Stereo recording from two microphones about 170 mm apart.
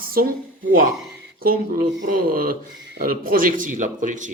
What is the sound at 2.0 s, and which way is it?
A man's voice, 55° right (ahead or behind).